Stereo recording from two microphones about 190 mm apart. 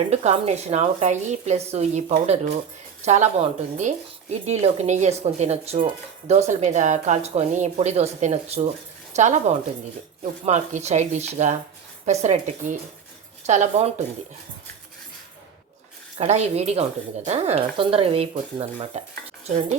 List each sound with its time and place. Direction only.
0.1 s speech: 35° right (ahead or behind)
16.1 s speech: 35° right (ahead or behind)